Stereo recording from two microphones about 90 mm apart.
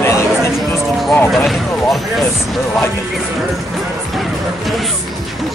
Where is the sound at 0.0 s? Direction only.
30° left (ahead or behind).